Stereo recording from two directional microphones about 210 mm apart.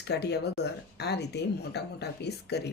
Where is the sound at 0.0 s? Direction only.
50° left (ahead or behind).